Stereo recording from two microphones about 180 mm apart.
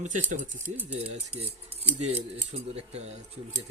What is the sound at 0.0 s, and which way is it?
Speech, 45° right (ahead or behind).